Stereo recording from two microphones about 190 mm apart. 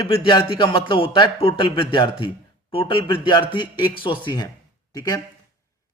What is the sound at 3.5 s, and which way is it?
Speech, 25° left (ahead or behind).